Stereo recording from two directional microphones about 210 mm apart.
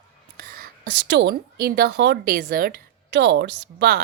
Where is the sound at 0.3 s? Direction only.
50° right (ahead or behind).